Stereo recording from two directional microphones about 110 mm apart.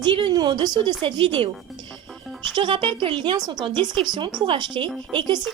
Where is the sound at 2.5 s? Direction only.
50° right (ahead or behind).